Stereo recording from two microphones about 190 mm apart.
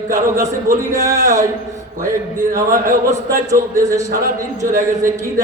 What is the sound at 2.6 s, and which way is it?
A man's voice, 15° right (ahead or behind).